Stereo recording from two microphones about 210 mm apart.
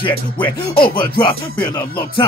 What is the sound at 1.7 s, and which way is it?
Speech, 25° left (ahead or behind).